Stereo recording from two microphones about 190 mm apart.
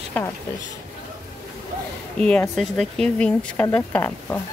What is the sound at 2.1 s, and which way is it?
A woman's voice, 5° left (ahead or behind).